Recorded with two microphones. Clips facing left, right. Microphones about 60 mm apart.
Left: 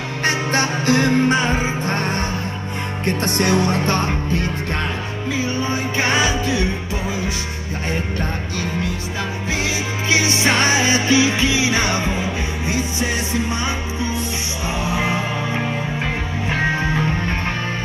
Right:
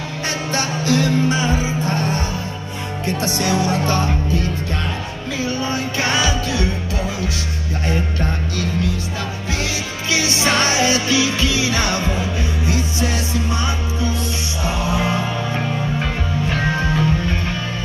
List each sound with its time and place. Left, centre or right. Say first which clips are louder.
0.2 s music: left 4 dB; left
5.4 s music: right 2 dB; centre
10.0 s music: left 1 dB; left